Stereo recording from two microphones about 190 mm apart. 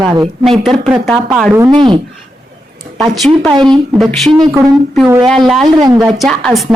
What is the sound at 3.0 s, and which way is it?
Speech, centre (ahead or behind).